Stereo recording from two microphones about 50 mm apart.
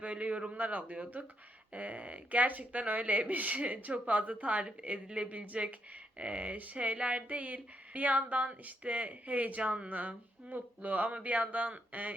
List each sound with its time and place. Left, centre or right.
0.0 s speech: right